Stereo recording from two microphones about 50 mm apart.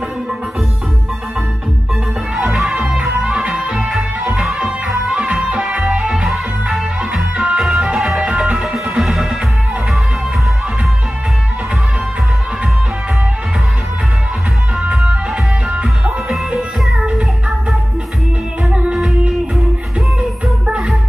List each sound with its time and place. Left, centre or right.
2.3 s music: centre
14.8 s music: right
18.7 s music: centre